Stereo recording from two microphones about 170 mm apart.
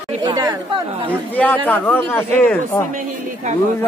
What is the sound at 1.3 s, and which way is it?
Speech, 10° left (ahead or behind).